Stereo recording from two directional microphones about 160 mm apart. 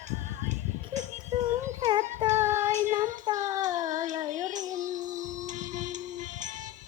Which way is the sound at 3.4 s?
50° right (ahead or behind).